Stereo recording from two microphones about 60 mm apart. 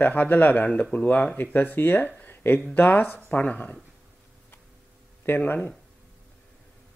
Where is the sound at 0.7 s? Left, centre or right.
Centre.